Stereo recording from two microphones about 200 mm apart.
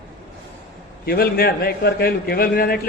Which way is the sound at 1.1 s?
50° left (ahead or behind).